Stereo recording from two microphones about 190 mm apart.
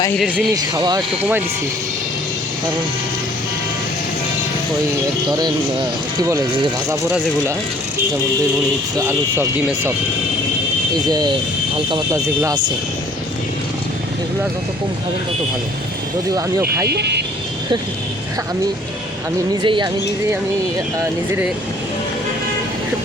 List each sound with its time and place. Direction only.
0.5 s speech: 20° right (ahead or behind)
6.1 s speech: 20° right (ahead or behind)
9.0 s speech: 15° right (ahead or behind)
11.1 s speech: 20° right (ahead or behind)
16.9 s speech: 60° right (ahead or behind)
19.6 s speech: 25° right (ahead or behind)